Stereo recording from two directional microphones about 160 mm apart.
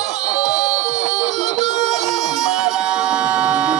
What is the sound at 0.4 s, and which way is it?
Music, 25° left (ahead or behind).